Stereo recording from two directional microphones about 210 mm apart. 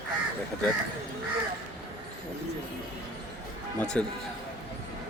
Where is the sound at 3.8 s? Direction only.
5° left (ahead or behind).